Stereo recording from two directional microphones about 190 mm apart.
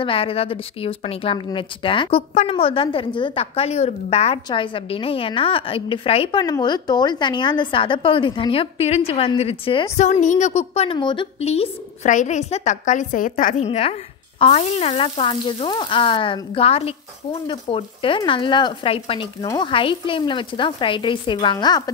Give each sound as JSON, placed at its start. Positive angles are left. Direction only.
{"t": 0.0, "sound": "a woman's voice", "side_deg": 30}
{"t": 9.9, "sound": "a woman's voice", "side_deg": 40}
{"t": 13.7, "sound": "a woman's voice", "side_deg": 30}